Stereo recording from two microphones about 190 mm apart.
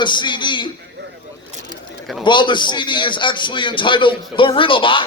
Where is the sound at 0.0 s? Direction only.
25° left (ahead or behind).